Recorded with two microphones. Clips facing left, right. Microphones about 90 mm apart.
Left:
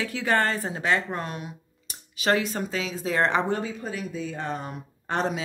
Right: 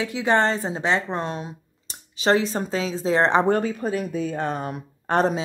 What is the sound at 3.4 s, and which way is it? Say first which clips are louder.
Speech: right 7 dB; 50° right (ahead or behind).